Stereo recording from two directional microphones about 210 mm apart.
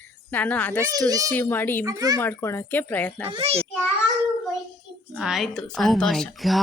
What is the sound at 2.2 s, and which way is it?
Speech, 10° left (ahead or behind).